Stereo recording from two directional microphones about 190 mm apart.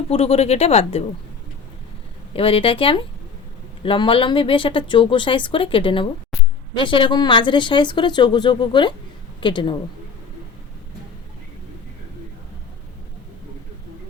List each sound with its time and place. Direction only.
0.1 s speech: 30° left (ahead or behind)
2.3 s speech: 30° left (ahead or behind)